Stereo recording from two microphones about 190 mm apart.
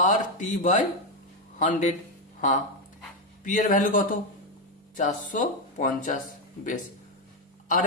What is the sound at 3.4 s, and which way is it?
Speech, 45° left (ahead or behind).